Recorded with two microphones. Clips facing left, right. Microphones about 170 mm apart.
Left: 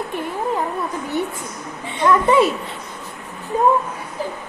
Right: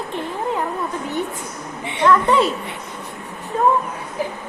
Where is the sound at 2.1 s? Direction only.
10° left (ahead or behind).